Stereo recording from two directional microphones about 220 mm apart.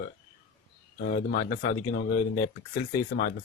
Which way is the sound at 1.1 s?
45° left (ahead or behind).